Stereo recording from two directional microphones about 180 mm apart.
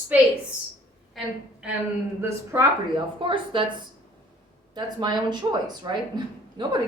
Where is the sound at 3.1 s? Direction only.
30° right (ahead or behind).